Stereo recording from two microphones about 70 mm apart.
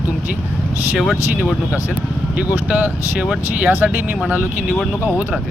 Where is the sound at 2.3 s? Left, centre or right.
Right.